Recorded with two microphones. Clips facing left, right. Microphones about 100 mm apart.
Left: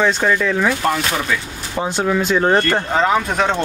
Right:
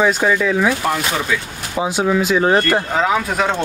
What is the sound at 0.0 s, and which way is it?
Speech, 5° right (ahead or behind).